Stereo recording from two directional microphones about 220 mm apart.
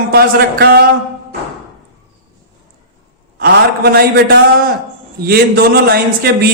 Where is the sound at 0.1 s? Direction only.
45° right (ahead or behind).